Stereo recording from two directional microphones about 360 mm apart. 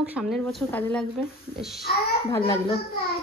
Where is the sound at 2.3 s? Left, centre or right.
Centre.